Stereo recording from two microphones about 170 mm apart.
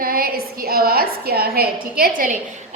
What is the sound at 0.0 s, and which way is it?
A woman's voice, 60° right (ahead or behind).